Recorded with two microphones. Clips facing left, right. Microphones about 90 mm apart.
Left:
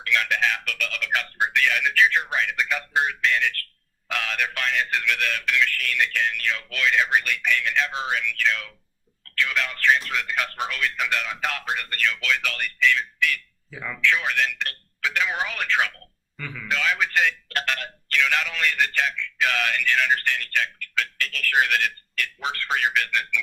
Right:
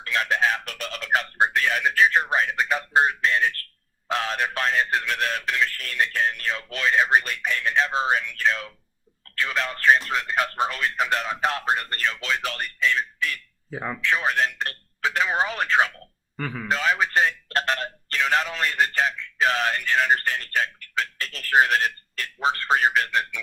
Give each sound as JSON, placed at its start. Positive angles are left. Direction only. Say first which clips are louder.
{"t": 0.0, "sound": "speech", "louder": "right 1 dB", "side_deg": -35}